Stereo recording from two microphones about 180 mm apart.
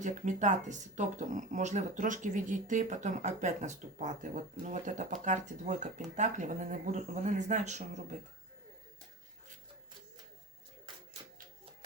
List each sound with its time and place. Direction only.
0.0 s speech: 45° right (ahead or behind)